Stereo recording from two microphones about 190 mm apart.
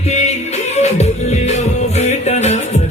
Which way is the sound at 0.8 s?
35° left (ahead or behind).